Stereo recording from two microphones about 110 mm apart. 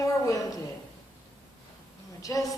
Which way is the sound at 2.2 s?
30° left (ahead or behind).